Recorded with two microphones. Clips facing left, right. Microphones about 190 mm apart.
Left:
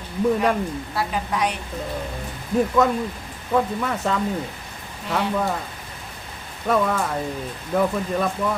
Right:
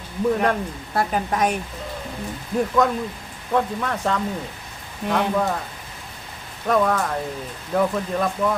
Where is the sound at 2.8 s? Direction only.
5° left (ahead or behind).